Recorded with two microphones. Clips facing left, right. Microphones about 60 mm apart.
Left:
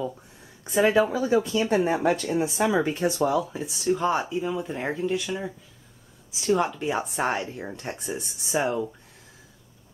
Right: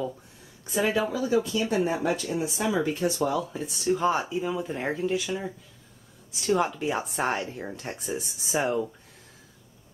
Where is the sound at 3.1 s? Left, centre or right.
Centre.